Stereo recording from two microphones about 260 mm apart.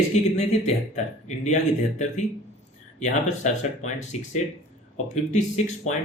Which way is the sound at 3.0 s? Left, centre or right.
Left.